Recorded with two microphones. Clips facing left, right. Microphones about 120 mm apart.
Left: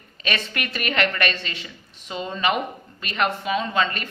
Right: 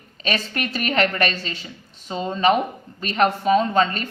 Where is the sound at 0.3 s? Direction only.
35° right (ahead or behind).